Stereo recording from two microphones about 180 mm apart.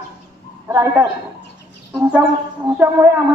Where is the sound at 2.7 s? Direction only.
15° right (ahead or behind).